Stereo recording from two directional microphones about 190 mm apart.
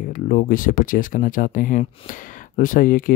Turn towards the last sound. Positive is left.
turn(degrees=45)  # may be behind; listen again after turning